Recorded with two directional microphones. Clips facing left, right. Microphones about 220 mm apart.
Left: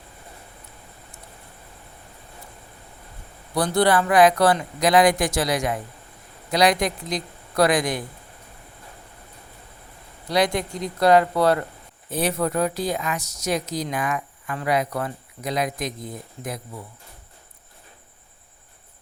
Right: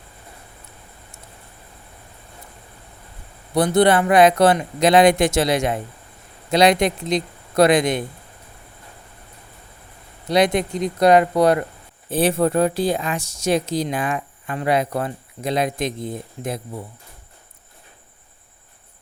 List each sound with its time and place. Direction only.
3.5 s speech: 20° right (ahead or behind)
10.2 s speech: 20° right (ahead or behind)
12.1 s speech: 30° right (ahead or behind)